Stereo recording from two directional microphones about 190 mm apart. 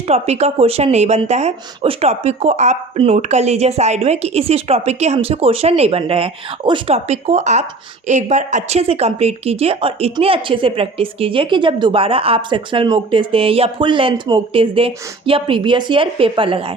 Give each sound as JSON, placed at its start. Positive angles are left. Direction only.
{"t": 0.1, "sound": "a woman's voice", "side_deg": -35}